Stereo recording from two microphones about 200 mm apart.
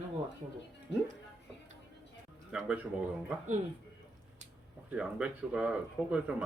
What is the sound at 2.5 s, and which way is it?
Speech, 5° right (ahead or behind).